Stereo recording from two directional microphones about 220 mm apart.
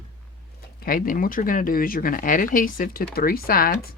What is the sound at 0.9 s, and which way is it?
Speech, 40° left (ahead or behind).